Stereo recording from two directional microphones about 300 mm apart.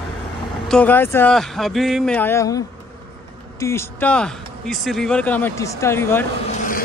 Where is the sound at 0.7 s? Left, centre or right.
Centre.